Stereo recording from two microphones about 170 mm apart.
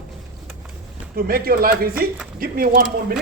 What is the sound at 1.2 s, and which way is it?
A man's voice, 60° right (ahead or behind).